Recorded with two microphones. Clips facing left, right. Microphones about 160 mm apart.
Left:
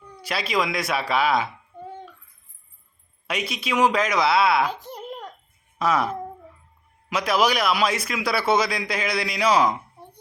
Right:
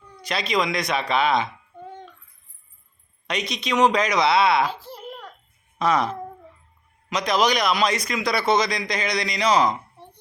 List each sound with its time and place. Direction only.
0.2 s speech: 5° left (ahead or behind)
3.2 s speech: 5° left (ahead or behind)
4.6 s baby cry: 15° left (ahead or behind)
5.8 s speech: 5° left (ahead or behind)